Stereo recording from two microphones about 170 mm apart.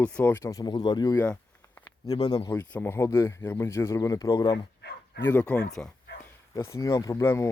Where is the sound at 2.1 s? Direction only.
25° left (ahead or behind).